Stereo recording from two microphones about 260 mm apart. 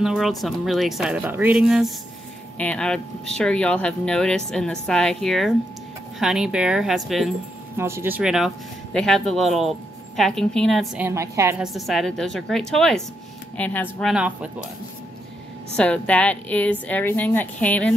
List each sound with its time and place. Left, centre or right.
0.0 s a woman's voice: centre
15.7 s a woman's voice: centre